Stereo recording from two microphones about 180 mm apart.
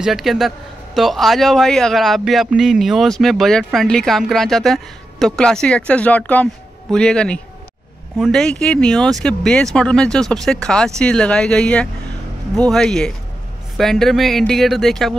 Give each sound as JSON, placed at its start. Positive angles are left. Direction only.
{"t": 0.0, "sound": "a man's voice", "side_deg": 0}